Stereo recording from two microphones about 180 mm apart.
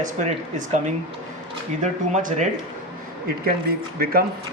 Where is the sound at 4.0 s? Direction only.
55° right (ahead or behind).